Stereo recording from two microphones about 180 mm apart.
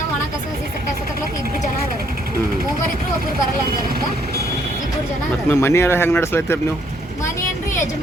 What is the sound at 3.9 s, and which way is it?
Speech, 55° right (ahead or behind).